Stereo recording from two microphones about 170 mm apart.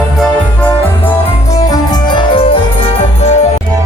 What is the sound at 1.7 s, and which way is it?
Music, 25° left (ahead or behind).